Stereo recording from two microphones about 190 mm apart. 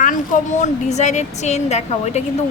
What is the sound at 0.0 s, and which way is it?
A woman's voice, 40° left (ahead or behind).